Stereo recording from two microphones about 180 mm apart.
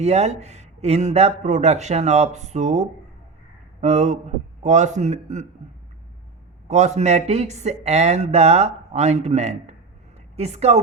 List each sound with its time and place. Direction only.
0.0 s speech: 40° right (ahead or behind)
6.7 s a woman's voice: 40° right (ahead or behind)